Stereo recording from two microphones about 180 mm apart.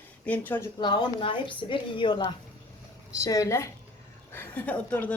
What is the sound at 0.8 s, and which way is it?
A woman's voice, 25° left (ahead or behind).